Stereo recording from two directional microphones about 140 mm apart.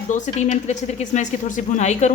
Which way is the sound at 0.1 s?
60° left (ahead or behind).